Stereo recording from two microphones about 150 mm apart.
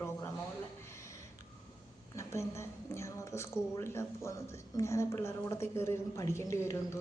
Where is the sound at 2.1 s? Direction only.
20° left (ahead or behind).